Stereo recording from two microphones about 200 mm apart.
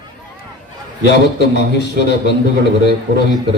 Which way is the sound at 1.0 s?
60° left (ahead or behind).